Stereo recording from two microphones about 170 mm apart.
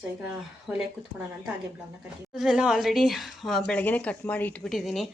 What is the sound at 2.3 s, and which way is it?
Speech, 5° right (ahead or behind).